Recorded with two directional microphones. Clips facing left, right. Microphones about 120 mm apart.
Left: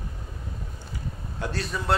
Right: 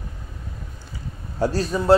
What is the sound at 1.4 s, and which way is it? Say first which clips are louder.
Speech: right 9 dB; 35° right (ahead or behind).